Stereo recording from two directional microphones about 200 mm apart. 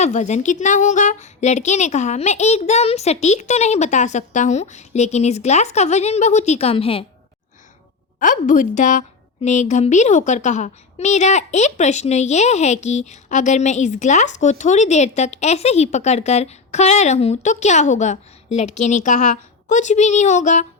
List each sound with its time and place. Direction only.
0.0 s a woman's voice: 35° left (ahead or behind)
8.2 s a woman's voice: 40° left (ahead or behind)